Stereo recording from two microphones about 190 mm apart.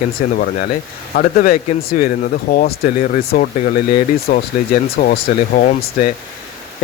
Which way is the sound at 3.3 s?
50° left (ahead or behind).